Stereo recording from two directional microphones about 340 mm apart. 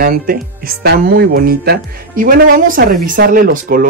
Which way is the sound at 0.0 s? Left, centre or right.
Right.